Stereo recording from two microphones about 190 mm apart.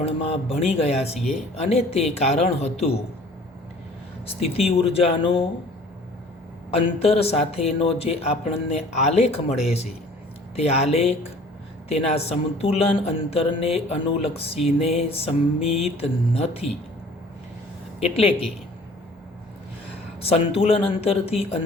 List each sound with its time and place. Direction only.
0.3 s a man's voice: 35° left (ahead or behind)
4.3 s a man's voice: 30° left (ahead or behind)
6.7 s a man's voice: 30° left (ahead or behind)
18.0 s a man's voice: 30° left (ahead or behind)
20.2 s a man's voice: 30° left (ahead or behind)